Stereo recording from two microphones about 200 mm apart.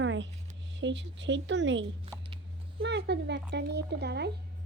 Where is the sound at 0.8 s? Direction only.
65° right (ahead or behind).